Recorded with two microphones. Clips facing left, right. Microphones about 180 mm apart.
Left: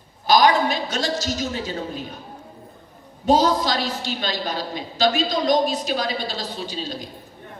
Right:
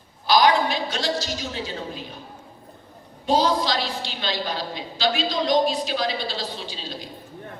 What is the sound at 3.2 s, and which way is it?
A woman's voice, 45° left (ahead or behind).